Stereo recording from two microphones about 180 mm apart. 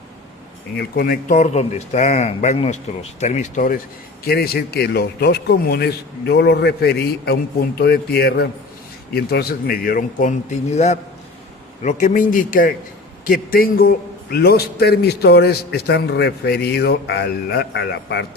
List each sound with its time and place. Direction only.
0.8 s speech: 55° left (ahead or behind)
4.3 s a man's voice: 60° left (ahead or behind)